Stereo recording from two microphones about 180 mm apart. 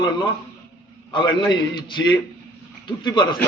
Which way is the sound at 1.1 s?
25° left (ahead or behind).